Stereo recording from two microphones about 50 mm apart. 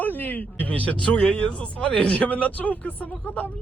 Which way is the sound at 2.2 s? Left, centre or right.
Left.